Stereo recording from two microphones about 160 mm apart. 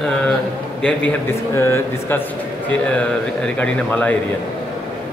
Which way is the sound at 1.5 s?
15° left (ahead or behind).